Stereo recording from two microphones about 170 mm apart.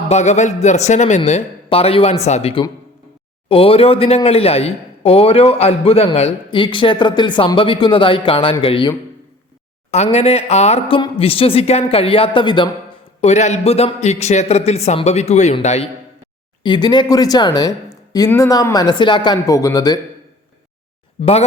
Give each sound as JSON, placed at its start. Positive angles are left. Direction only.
{"t": 0.1, "sound": "speech", "side_deg": 45}
{"t": 9.9, "sound": "speech", "side_deg": 40}
{"t": 13.2, "sound": "speech", "side_deg": 40}
{"t": 16.6, "sound": "speech", "side_deg": 25}
{"t": 21.2, "sound": "speech", "side_deg": 40}